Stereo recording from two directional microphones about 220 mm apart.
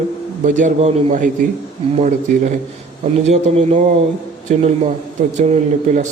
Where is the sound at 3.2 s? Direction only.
30° right (ahead or behind).